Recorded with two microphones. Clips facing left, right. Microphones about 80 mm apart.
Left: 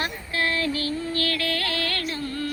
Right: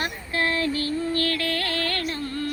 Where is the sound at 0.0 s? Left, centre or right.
Right.